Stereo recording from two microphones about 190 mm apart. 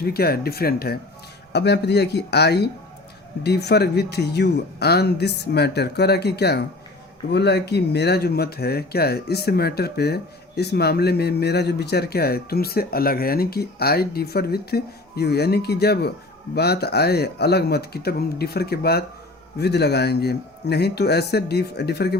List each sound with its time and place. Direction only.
0.0 s speech: 55° left (ahead or behind)